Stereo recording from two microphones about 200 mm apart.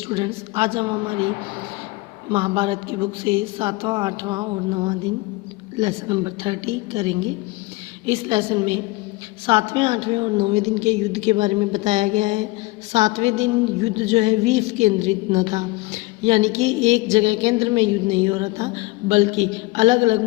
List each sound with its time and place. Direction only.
0.1 s a woman's voice: 25° right (ahead or behind)
2.3 s a woman's voice: 30° right (ahead or behind)
6.1 s a woman's voice: 25° right (ahead or behind)